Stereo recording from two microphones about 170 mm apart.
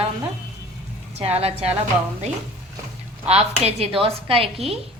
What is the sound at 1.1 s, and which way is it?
Speech, 35° right (ahead or behind).